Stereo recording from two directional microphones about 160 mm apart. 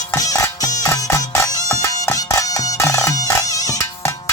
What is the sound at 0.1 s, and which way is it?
Music, 20° left (ahead or behind).